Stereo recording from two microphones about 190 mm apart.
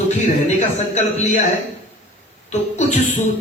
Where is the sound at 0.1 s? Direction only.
35° left (ahead or behind).